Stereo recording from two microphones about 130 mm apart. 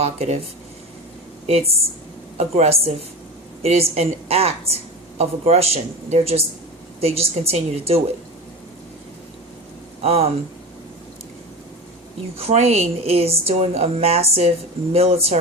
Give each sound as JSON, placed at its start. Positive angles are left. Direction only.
{"t": 0.0, "sound": "a woman's voice", "side_deg": -55}
{"t": 1.5, "sound": "a woman's voice", "side_deg": -50}
{"t": 10.0, "sound": "a woman's voice", "side_deg": -50}
{"t": 12.4, "sound": "a woman's voice", "side_deg": -50}